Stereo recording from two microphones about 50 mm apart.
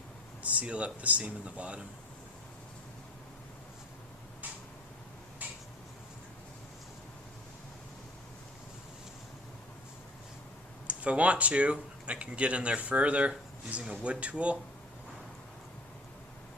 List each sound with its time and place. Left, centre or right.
0.4 s speech: right
5.4 s tick-tock: right
10.8 s speech: right